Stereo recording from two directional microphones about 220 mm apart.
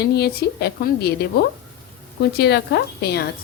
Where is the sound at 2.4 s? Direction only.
50° left (ahead or behind).